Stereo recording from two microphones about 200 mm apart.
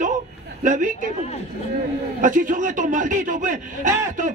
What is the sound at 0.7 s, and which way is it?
Speech, 40° right (ahead or behind).